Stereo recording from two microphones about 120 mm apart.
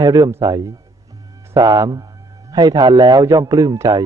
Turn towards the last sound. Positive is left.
turn(degrees=-30)  # may be behind; listen again after turning